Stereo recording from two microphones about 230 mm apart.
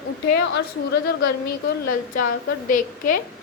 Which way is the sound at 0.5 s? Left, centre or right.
Left.